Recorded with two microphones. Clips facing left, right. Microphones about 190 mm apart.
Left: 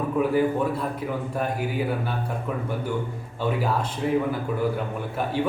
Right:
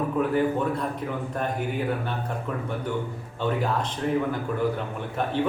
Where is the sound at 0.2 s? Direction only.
5° left (ahead or behind).